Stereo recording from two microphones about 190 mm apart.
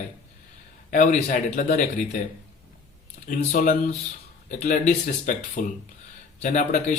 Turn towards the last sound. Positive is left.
turn(degrees=40)  # may be behind; listen again after turning